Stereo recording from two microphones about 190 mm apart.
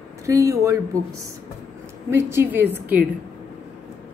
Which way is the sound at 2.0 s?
15° right (ahead or behind).